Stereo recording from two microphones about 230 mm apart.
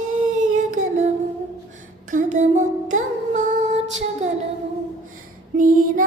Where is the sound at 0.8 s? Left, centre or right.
Right.